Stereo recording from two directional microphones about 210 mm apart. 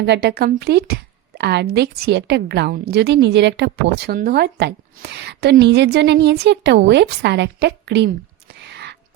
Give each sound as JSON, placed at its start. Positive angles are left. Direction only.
{"t": 0.0, "sound": "a woman's voice", "side_deg": -55}